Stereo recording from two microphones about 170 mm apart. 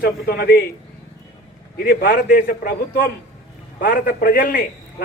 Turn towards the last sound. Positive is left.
turn(degrees=55)  # may be behind; listen again after turning